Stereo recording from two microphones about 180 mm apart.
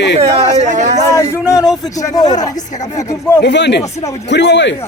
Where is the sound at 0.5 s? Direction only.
40° right (ahead or behind).